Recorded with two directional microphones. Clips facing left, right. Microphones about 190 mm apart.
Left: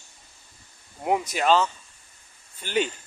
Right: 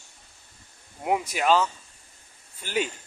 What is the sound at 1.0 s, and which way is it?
A man's voice, 5° right (ahead or behind).